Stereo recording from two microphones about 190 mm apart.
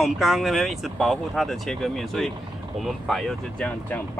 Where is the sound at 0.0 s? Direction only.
Centre (ahead or behind).